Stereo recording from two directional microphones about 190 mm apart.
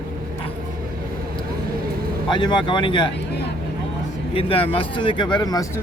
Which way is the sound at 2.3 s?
25° left (ahead or behind).